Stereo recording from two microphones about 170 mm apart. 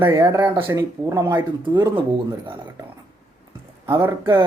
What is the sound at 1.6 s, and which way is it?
Speech, 30° right (ahead or behind).